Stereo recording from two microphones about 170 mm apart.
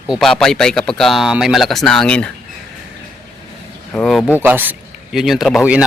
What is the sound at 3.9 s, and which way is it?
Speech, 5° left (ahead or behind).